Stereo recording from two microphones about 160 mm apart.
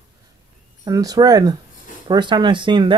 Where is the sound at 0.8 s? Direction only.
25° right (ahead or behind).